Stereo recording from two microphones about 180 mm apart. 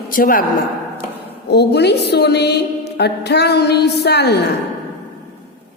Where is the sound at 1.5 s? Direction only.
65° left (ahead or behind).